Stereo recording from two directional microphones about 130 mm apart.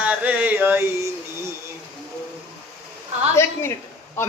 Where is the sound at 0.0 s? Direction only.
10° right (ahead or behind).